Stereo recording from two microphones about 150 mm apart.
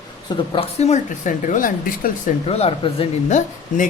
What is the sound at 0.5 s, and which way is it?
A woman's voice, 50° left (ahead or behind).